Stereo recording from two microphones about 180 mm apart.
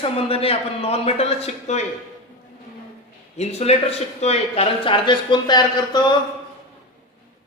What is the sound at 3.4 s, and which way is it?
Speech, 35° left (ahead or behind).